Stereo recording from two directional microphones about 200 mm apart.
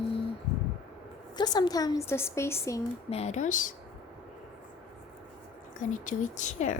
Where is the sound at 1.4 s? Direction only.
20° left (ahead or behind).